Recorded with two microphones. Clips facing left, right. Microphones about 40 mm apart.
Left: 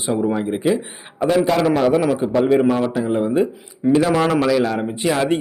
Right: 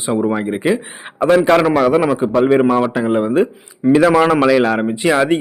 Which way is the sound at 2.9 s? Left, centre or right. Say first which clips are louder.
Right 4 dB; right.